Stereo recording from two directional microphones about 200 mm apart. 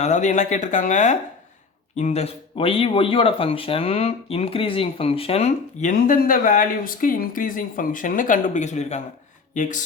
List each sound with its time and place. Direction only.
0.0 s speech: 35° left (ahead or behind)